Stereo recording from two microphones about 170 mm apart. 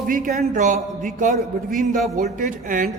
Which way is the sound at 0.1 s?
55° right (ahead or behind).